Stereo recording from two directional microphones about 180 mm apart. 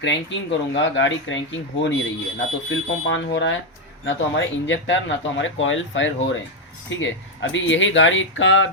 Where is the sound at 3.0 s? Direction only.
85° left.